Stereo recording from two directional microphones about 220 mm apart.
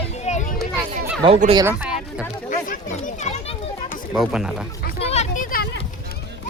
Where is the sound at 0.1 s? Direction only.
30° left (ahead or behind).